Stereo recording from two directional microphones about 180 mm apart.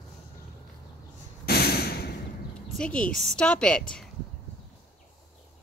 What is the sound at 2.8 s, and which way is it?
A woman's voice, 5° left (ahead or behind).